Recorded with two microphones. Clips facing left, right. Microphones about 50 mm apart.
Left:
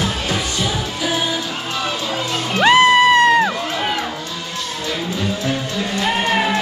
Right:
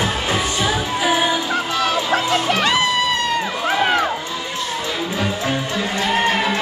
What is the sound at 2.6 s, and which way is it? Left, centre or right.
Music, left.